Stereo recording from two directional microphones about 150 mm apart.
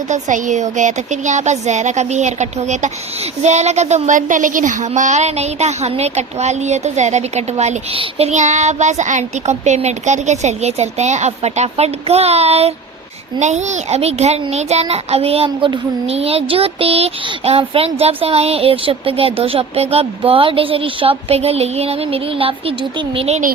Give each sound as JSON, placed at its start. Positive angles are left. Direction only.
{"t": 0.1, "sound": "a child's voice", "side_deg": -55}